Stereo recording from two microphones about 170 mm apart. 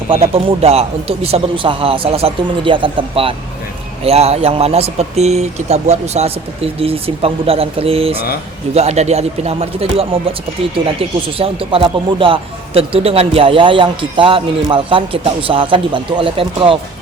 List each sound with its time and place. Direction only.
0.1 s speech: 35° right (ahead or behind)